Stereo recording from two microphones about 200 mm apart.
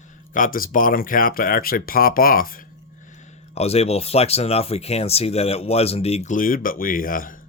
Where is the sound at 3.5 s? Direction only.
30° left (ahead or behind).